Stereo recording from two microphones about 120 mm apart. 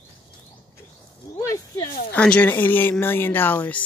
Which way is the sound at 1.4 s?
30° left (ahead or behind).